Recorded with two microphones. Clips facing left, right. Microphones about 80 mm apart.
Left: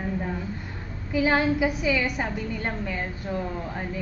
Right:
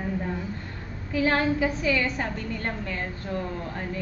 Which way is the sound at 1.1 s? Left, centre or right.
Centre.